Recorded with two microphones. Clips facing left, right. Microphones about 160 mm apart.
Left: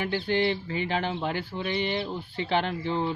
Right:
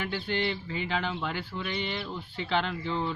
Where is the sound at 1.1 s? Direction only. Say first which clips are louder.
Left 3 dB; 35° left (ahead or behind).